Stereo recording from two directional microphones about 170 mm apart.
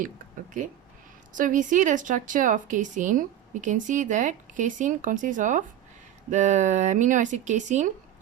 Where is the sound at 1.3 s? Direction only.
50° right (ahead or behind).